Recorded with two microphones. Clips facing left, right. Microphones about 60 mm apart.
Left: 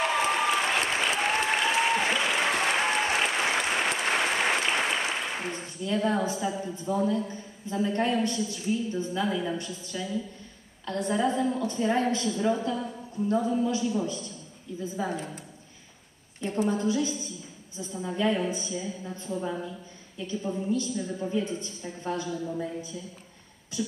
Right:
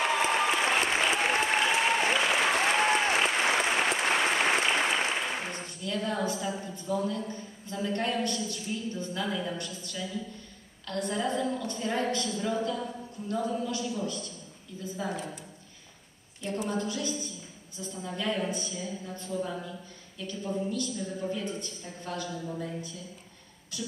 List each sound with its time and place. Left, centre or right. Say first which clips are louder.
0.2 s applause: left 1 dB; centre
5.5 s a woman's voice: left 4 dB; left
16.3 s a woman's voice: left 5 dB; left
16.6 s a woman's voice: left 6 dB; left